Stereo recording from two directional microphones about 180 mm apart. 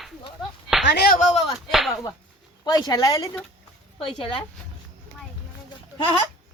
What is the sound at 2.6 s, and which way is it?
Speech, 20° left (ahead or behind).